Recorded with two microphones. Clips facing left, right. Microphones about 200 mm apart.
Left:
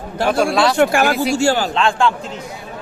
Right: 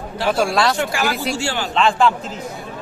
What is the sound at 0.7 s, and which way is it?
Speech, 55° left (ahead or behind).